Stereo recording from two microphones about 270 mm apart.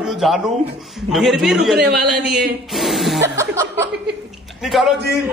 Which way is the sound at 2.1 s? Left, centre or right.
Right.